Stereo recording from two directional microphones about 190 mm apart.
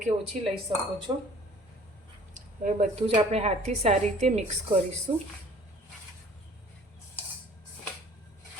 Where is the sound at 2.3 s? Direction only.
40° right (ahead or behind).